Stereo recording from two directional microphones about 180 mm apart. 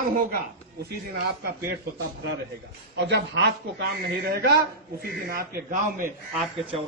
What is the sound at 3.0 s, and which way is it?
A man's voice, 70° right (ahead or behind).